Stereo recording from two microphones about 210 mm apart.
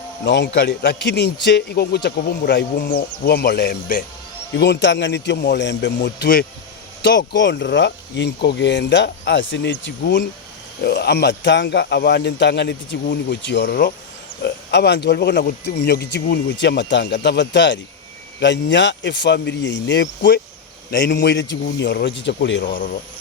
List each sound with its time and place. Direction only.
0.3 s speech: 55° left (ahead or behind)
4.5 s speech: 55° left (ahead or behind)